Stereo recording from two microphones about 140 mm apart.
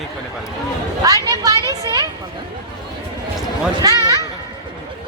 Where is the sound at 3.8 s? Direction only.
25° right (ahead or behind).